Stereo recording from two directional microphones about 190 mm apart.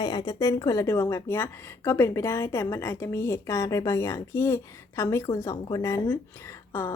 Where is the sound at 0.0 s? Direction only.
20° left (ahead or behind).